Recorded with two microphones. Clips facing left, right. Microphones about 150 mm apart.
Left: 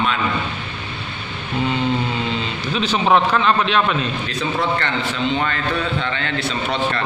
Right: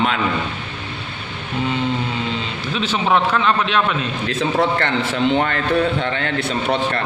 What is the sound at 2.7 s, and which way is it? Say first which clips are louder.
A man's voice: left 2 dB; centre (ahead or behind).